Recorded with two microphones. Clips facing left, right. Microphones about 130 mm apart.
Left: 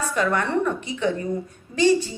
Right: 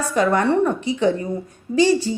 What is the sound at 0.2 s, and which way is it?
A woman's voice, 35° right (ahead or behind).